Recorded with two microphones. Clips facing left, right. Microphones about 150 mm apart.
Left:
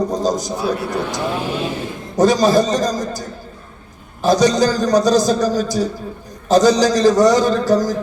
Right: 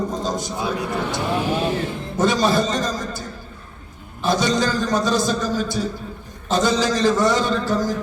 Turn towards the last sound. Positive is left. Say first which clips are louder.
# left 6 dB
turn(degrees=40)  # may be behind; listen again after turning